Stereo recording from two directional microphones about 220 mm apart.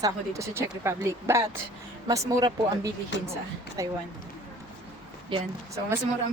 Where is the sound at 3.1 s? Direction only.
55° left (ahead or behind).